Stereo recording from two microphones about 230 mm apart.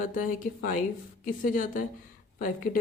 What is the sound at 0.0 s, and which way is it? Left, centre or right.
A woman's voice, left.